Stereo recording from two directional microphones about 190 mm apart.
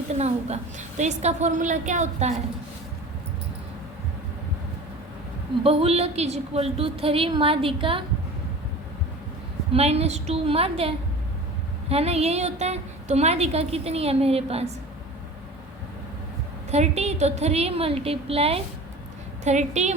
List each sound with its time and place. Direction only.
0.1 s a woman's voice: 35° right (ahead or behind)
5.6 s a woman's voice: 30° right (ahead or behind)
9.7 s a woman's voice: 35° right (ahead or behind)
16.7 s a woman's voice: 35° right (ahead or behind)